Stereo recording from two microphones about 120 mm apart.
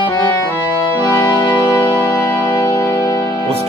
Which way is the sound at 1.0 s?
35° left (ahead or behind).